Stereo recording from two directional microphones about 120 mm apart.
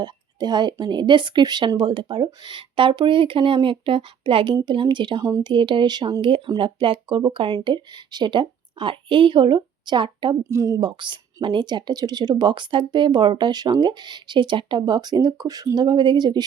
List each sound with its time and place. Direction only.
0.0 s speech: 35° right (ahead or behind)
10.5 s a woman's voice: 25° right (ahead or behind)
10.8 s speech: 40° right (ahead or behind)